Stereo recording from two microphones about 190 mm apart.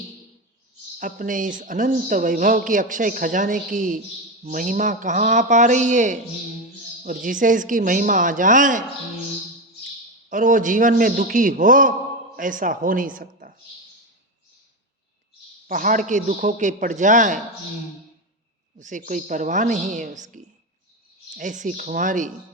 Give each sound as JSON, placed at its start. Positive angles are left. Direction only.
{"t": 0.9, "sound": "a man's voice", "side_deg": -45}
{"t": 10.2, "sound": "speech", "side_deg": -45}
{"t": 15.6, "sound": "a man's voice", "side_deg": -45}
{"t": 18.8, "sound": "a man's voice", "side_deg": -40}